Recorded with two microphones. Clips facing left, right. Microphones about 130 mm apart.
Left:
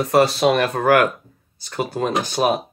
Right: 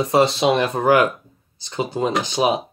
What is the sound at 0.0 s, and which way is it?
Speech, 20° right (ahead or behind).